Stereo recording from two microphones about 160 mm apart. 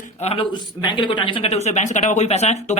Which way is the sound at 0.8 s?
30° left (ahead or behind).